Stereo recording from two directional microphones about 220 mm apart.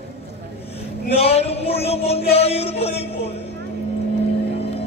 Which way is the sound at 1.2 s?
30° left (ahead or behind).